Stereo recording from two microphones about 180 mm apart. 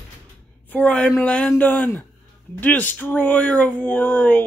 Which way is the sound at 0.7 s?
5° left (ahead or behind).